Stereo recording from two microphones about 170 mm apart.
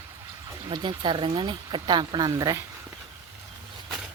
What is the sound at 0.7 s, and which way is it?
Speech, 25° right (ahead or behind).